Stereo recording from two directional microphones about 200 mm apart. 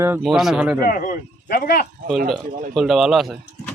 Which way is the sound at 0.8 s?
45° left (ahead or behind).